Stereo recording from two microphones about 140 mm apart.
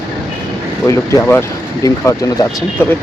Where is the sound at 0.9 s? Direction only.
20° left (ahead or behind).